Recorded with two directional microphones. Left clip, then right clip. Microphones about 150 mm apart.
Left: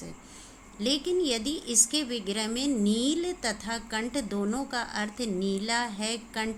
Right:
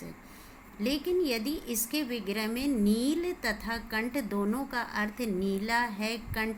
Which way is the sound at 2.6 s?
85° left.